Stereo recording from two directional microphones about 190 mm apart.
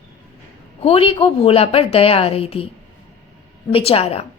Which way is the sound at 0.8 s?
30° left (ahead or behind).